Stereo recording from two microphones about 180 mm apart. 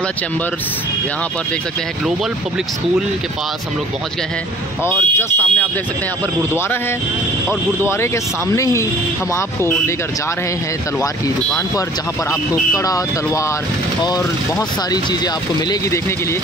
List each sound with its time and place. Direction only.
4.8 s speech: 10° left (ahead or behind)
8.5 s speech: 15° left (ahead or behind)
12.3 s speech: 20° left (ahead or behind)